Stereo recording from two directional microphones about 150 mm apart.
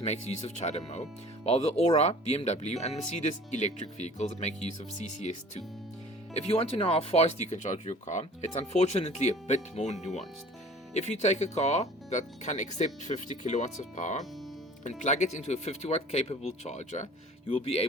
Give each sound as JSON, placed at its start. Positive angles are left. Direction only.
{"t": 0.0, "sound": "speech", "side_deg": 45}